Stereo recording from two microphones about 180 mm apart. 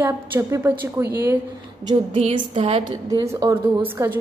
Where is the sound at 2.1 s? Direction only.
40° right (ahead or behind).